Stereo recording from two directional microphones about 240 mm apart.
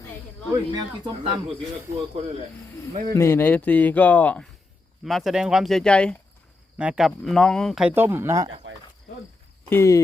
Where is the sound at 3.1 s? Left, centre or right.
Centre.